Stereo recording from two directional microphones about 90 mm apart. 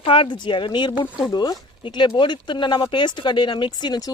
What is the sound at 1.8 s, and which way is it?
Speech, 65° left (ahead or behind).